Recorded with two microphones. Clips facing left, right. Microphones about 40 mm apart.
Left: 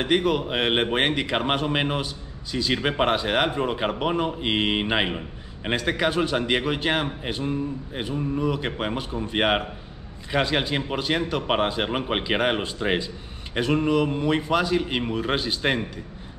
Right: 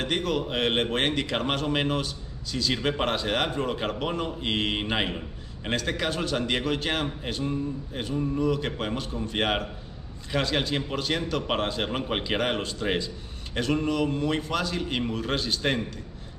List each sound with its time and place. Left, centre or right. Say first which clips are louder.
0.0 s speech: left 5 dB; centre